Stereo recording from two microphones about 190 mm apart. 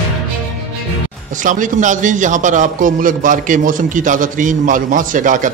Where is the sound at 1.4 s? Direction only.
45° right (ahead or behind).